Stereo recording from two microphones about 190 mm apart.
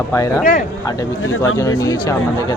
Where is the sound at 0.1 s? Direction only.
10° left (ahead or behind).